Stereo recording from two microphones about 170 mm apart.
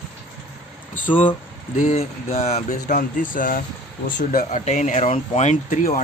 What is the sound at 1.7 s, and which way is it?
Speech, 45° left (ahead or behind).